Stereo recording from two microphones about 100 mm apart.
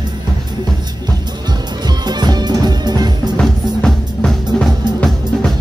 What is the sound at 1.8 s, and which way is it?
Music, 45° right (ahead or behind).